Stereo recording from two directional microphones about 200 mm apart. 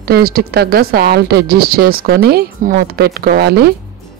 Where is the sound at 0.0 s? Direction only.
50° right (ahead or behind).